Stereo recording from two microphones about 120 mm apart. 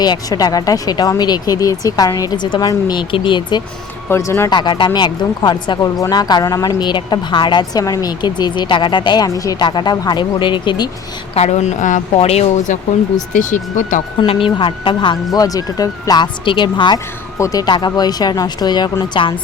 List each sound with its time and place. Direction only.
0.0 s speech: 35° left (ahead or behind)
4.1 s speech: 20° left (ahead or behind)
4.4 s speech: 40° left (ahead or behind)
11.3 s a woman's voice: 70° left (ahead or behind); by 12.0 s 90° left
12.1 s speech: 60° left (ahead or behind)
13.3 s speech: 90° left
14.3 s a woman's voice: 45° left (ahead or behind)
15.4 s speech: 30° left (ahead or behind)
17.3 s speech: 30° left (ahead or behind)